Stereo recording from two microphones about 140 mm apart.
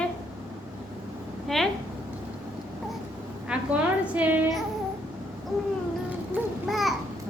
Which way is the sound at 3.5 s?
10° right (ahead or behind).